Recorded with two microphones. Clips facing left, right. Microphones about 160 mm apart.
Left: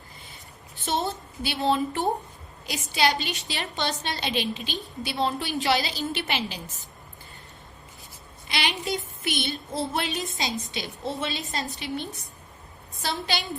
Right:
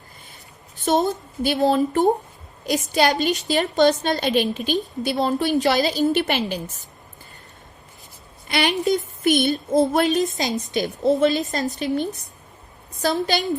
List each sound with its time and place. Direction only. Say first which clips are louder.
0.9 s a woman's voice: right 8 dB; 45° right (ahead or behind)
8.4 s a woman's voice: right 9 dB; 50° right (ahead or behind)